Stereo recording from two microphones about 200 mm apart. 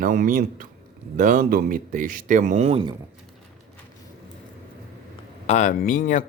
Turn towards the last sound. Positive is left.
turn(degrees=40)  # may be behind; listen again after turning